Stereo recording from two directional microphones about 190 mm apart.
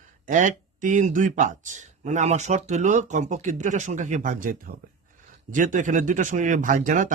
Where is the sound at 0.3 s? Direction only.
45° right (ahead or behind).